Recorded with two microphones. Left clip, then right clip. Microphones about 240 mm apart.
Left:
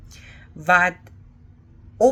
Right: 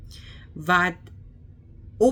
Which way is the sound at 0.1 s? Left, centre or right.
Centre.